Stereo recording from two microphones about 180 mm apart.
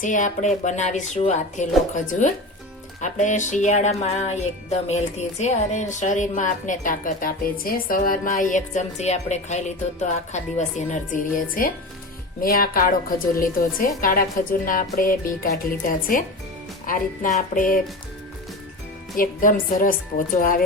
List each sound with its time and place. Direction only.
0.0 s a woman's voice: 45° left (ahead or behind)
16.8 s speech: 50° left (ahead or behind)
19.1 s speech: 50° left (ahead or behind)